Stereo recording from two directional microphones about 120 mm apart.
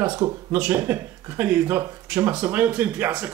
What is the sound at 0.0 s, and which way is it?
Speech, 15° right (ahead or behind).